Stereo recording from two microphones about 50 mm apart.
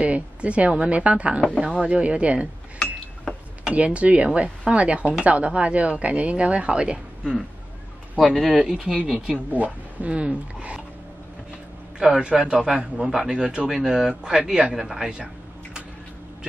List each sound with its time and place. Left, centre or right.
0.0 s speech: right
3.6 s speech: right
8.2 s speech: centre
9.5 s speech: right
12.2 s a man's voice: centre
14.4 s speech: right
14.8 s speech: centre